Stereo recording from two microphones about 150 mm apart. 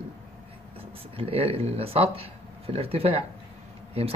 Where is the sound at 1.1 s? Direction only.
40° right (ahead or behind).